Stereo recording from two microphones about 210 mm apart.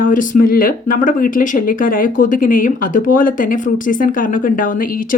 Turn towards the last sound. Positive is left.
turn(degrees=40)  # may be behind; listen again after turning